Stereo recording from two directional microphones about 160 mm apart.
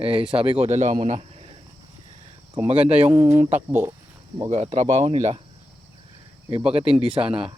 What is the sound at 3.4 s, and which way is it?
Speech, 45° right (ahead or behind).